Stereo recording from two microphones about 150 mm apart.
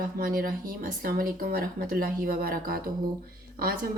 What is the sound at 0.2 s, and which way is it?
Speech, 70° right (ahead or behind).